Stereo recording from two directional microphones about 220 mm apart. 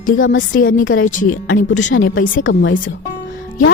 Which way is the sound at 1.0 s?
35° left (ahead or behind).